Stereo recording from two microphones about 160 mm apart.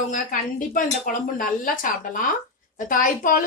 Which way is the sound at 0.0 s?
50° left (ahead or behind).